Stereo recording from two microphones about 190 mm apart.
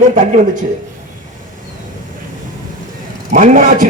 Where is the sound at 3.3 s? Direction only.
45° right (ahead or behind).